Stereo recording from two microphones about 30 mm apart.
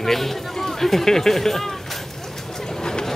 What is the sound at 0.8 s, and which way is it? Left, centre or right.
Speech, centre.